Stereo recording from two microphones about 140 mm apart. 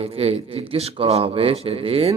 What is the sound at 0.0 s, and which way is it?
Music, 45° right (ahead or behind).